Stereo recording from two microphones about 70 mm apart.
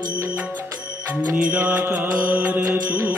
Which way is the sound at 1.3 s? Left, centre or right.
Centre.